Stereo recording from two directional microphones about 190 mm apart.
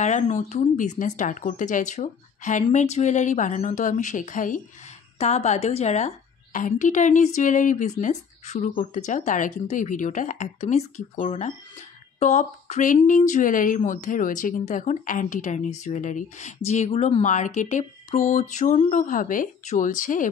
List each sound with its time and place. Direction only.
0.0 s a woman's voice: 40° left (ahead or behind)